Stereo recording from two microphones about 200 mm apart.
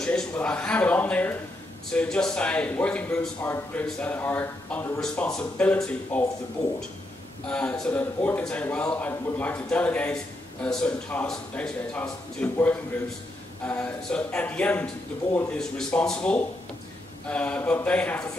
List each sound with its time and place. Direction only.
0.0 s a man's voice: 5° left (ahead or behind)
7.4 s a man's voice: 5° left (ahead or behind)